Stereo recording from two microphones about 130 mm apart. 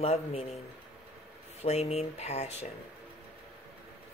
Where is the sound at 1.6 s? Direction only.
55° left (ahead or behind).